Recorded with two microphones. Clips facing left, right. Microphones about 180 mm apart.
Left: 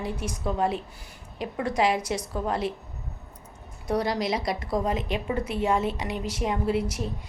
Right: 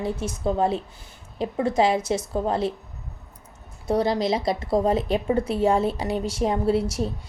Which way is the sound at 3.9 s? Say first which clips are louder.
Right 4 dB; 25° right (ahead or behind).